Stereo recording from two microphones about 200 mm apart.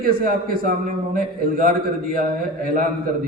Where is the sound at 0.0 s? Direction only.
45° right (ahead or behind).